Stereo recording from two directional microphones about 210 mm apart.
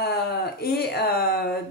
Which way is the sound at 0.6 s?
50° left (ahead or behind).